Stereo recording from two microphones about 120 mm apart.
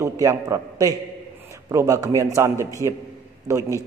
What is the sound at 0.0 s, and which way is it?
A man's voice, 25° right (ahead or behind).